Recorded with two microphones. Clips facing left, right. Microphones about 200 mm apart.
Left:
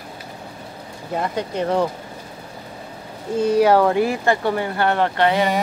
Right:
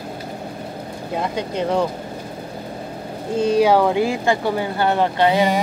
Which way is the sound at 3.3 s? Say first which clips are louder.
Even; 30° right (ahead or behind).